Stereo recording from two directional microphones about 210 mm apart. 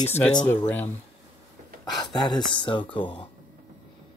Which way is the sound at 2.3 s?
25° left (ahead or behind).